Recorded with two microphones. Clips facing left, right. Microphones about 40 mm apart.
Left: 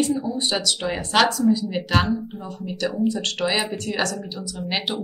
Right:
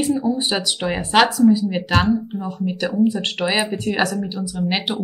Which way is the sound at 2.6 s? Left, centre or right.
Right.